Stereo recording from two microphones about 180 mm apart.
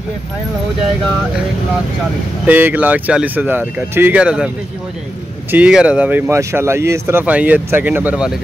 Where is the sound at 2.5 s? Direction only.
10° right (ahead or behind).